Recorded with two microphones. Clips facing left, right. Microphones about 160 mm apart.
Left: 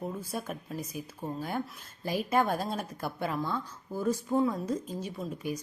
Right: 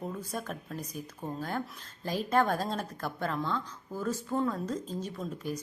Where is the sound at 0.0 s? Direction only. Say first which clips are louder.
Left 1 dB; 10° left (ahead or behind).